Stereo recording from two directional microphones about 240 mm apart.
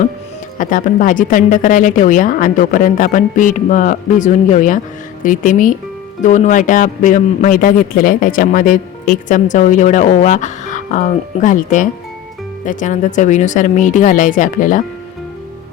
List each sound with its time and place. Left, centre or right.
0.6 s a man's voice: left